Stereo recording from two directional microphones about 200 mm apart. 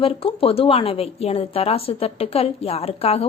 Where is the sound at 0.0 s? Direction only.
30° left (ahead or behind).